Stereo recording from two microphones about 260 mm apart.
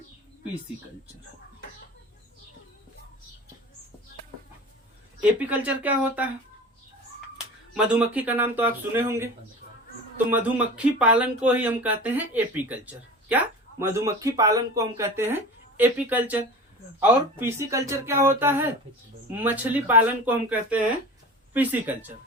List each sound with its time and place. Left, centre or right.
5.4 s speech: centre
7.7 s speech: centre